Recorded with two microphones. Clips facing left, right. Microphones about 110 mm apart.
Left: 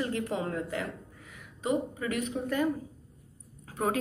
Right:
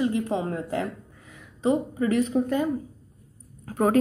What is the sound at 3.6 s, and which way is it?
Speech, 45° right (ahead or behind).